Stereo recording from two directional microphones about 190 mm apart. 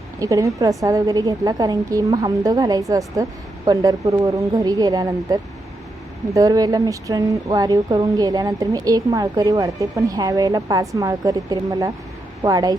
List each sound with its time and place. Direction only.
0.2 s a woman's voice: 15° right (ahead or behind)